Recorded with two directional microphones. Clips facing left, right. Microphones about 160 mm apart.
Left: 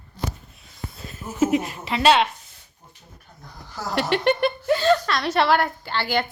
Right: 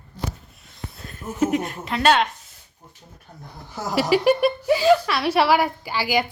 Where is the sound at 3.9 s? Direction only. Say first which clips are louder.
Right 3 dB; 5° right (ahead or behind).